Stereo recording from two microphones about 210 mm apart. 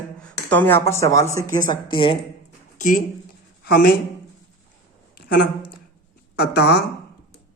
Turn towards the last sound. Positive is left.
turn(degrees=50)  # may be behind; listen again after turning